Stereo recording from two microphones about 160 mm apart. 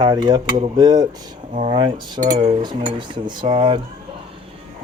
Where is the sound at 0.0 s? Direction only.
25° right (ahead or behind).